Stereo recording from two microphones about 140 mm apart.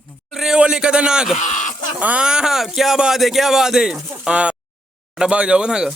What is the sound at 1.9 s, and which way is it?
Speech, 10° right (ahead or behind).